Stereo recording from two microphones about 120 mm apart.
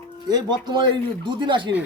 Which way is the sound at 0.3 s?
35° right (ahead or behind).